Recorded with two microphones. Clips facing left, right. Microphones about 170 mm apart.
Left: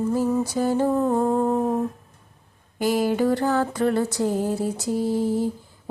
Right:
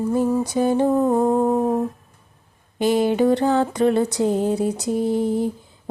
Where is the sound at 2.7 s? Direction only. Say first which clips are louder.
Right 3 dB; 20° right (ahead or behind).